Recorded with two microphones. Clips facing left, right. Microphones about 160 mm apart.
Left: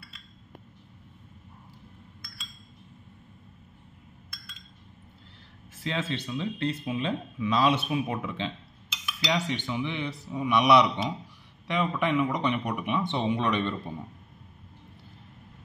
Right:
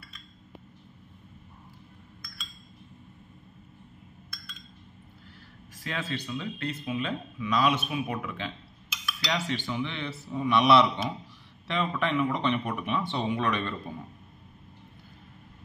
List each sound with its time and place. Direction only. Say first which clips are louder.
5.9 s a man's voice: left 2 dB; 25° left (ahead or behind)